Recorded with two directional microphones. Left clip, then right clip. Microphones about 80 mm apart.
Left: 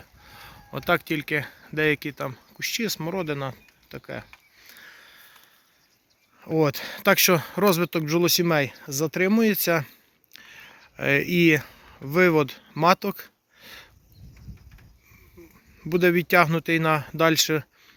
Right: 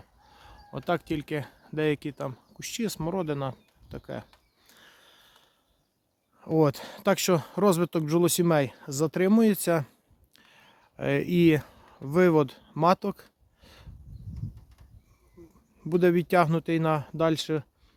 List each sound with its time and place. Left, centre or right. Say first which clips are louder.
0.3 s speech: left 6 dB; centre; by 2.6 s right
2.6 s a sound: left 6 dB; right
6.4 s speech: left 1 dB; right
6.9 s speech: left 5 dB; right
7.7 s speech: left 1 dB; right
10.3 s speech: left 11 dB; right
13.6 s a sound: left 10 dB; centre
15.8 s speech: left 3 dB; right
17.2 s speech: left 6 dB; centre